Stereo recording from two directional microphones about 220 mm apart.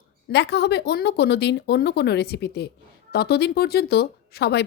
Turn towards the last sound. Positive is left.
turn(degrees=50)  # may be behind; listen again after turning